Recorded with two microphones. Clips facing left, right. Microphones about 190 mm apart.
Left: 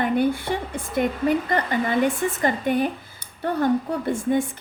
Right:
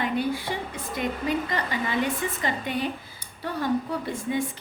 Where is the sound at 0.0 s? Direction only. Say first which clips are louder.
Left 5 dB; 55° left (ahead or behind).